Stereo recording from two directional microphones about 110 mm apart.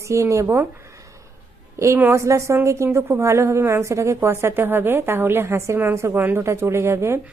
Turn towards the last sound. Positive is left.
turn(degrees=-25)  # may be behind; listen again after turning